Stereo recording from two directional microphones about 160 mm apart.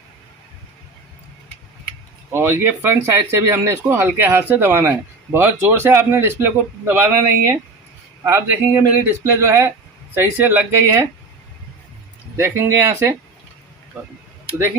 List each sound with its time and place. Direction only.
2.3 s speech: 15° right (ahead or behind)
12.4 s speech: 15° right (ahead or behind)